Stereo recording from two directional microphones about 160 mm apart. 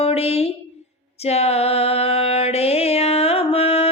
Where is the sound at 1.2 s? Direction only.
40° left (ahead or behind).